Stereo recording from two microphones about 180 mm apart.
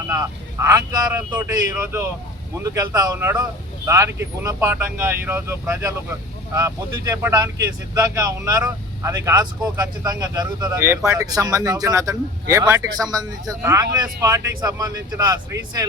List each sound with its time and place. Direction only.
0.1 s speech: 15° right (ahead or behind)